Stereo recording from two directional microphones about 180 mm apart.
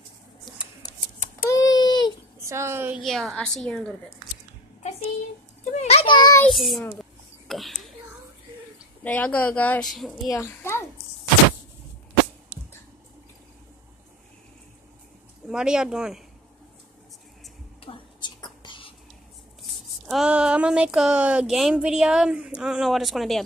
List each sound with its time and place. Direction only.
1.4 s a sound: 20° left (ahead or behind)
2.4 s a woman's voice: 15° right (ahead or behind)
3.0 s speech: centre (ahead or behind)
5.7 s a sound: 35° left (ahead or behind)
6.4 s a sound: centre (ahead or behind)
9.0 s speech: 10° left (ahead or behind)
10.2 s a woman's voice: 15° left (ahead or behind)
15.4 s speech: 5° right (ahead or behind)
17.8 s whispering: 25° left (ahead or behind)
19.6 s speech: centre (ahead or behind)